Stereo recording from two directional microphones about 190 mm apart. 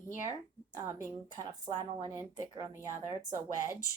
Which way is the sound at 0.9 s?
15° right (ahead or behind).